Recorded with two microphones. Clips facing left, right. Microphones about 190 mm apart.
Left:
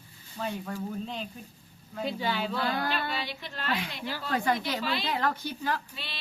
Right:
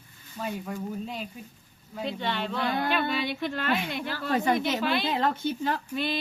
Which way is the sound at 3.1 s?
55° right (ahead or behind).